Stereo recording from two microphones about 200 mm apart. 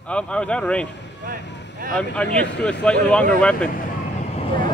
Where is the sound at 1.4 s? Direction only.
60° left (ahead or behind).